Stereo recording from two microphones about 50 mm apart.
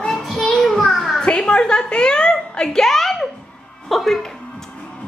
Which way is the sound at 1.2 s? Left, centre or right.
Centre.